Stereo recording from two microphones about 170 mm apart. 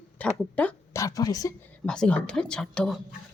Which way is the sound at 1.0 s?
20° left (ahead or behind).